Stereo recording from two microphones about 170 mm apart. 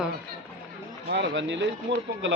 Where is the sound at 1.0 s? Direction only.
90° right.